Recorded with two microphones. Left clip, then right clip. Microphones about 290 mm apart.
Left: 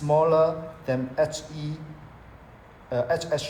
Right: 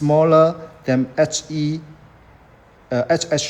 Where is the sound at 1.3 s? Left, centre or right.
Right.